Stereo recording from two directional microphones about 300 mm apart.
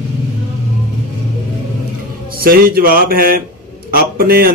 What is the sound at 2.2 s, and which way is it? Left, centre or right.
Speech, right.